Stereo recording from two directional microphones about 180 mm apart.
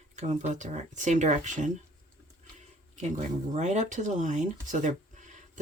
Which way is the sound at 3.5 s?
40° right (ahead or behind).